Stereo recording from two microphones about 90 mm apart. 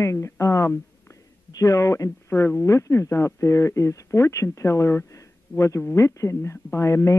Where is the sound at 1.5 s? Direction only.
40° left (ahead or behind).